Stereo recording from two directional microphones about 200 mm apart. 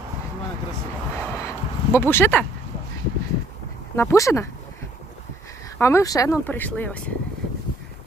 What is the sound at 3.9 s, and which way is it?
Speech, 15° left (ahead or behind).